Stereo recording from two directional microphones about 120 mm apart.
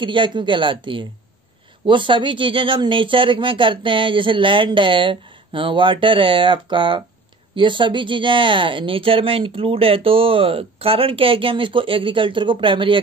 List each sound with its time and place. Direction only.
0.0 s speech: 45° right (ahead or behind)